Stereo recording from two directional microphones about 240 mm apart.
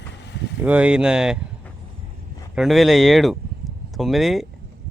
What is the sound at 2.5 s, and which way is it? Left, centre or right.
Speech, centre.